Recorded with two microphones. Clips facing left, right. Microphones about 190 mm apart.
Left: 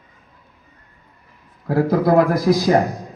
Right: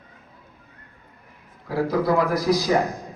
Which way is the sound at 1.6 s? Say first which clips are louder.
Left 5 dB; 50° left (ahead or behind).